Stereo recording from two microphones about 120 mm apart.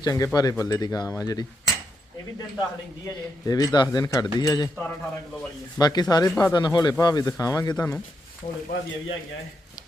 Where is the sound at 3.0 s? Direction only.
30° left (ahead or behind).